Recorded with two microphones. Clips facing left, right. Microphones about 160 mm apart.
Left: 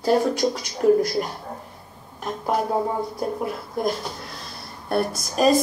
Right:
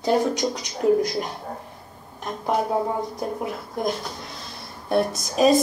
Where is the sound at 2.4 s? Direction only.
Centre (ahead or behind).